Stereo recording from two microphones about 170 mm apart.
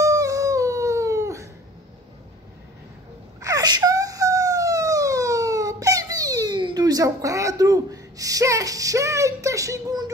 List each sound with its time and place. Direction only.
0.0 s dog: 20° right (ahead or behind)
3.3 s wail: 20° right (ahead or behind)